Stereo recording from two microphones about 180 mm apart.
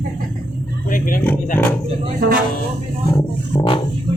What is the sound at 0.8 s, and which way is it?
Speech, 50° left (ahead or behind).